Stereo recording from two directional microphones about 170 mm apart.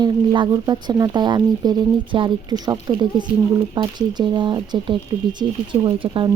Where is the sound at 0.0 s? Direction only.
25° right (ahead or behind).